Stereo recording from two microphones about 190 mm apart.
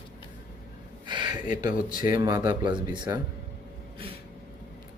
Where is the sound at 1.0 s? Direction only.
25° right (ahead or behind).